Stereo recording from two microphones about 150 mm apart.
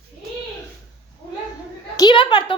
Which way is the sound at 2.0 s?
30° left (ahead or behind).